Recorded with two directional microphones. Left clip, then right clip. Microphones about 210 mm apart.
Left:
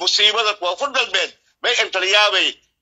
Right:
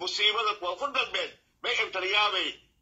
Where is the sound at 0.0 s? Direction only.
40° left (ahead or behind).